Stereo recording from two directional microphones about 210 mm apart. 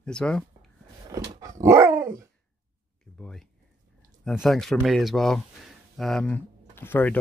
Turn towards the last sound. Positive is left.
turn(degrees=10)  # may be behind; listen again after turning